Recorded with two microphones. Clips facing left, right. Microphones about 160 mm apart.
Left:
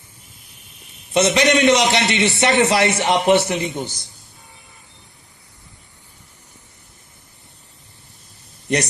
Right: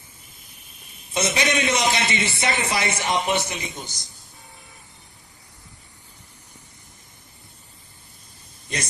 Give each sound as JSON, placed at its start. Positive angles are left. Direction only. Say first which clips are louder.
{"t": 1.1, "sound": "a man's voice", "louder": "left 8 dB", "side_deg": 65}
{"t": 8.6, "sound": "speech", "louder": "left 11 dB", "side_deg": 70}